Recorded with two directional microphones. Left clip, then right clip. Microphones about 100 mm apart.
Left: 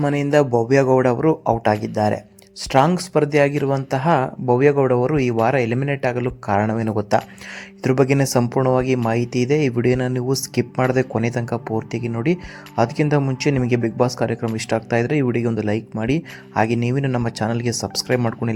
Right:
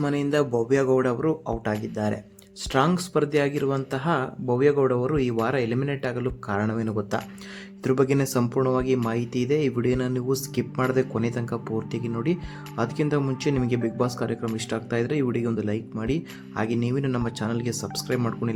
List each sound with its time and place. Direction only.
0.0 s speech: 45° left (ahead or behind)
2.7 s speech: 40° left (ahead or behind)
17.2 s speech: 45° left (ahead or behind)
18.2 s speech: 35° left (ahead or behind)